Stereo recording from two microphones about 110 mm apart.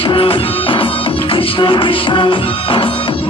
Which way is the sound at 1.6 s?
50° left (ahead or behind).